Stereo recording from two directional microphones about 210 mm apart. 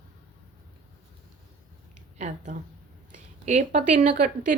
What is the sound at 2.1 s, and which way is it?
A woman's voice, 35° right (ahead or behind).